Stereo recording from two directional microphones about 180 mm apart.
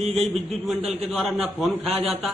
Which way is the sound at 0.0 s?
35° right (ahead or behind).